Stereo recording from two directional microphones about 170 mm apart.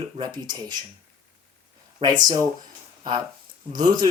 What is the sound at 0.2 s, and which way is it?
Speech, 25° right (ahead or behind).